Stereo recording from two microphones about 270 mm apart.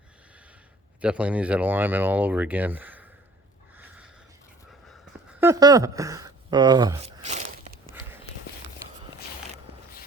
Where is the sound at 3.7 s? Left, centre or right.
Centre.